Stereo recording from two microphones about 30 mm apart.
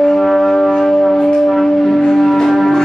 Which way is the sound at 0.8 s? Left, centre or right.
Centre.